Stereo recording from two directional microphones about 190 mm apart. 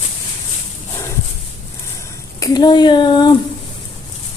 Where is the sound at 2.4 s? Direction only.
20° left (ahead or behind).